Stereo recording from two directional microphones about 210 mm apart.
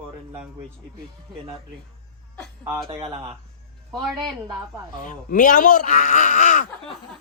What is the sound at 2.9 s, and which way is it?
Speech, 25° right (ahead or behind).